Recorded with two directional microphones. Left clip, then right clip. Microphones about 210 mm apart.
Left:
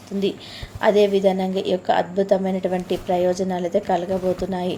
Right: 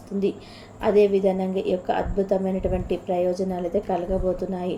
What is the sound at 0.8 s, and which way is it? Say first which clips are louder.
A woman's voice: left 2 dB; 15° left (ahead or behind).